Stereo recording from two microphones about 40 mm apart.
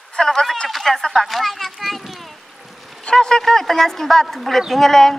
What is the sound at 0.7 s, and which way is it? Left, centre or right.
Speech, centre.